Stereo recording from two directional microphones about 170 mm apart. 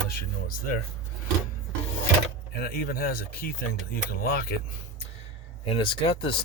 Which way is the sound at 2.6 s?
60° left (ahead or behind).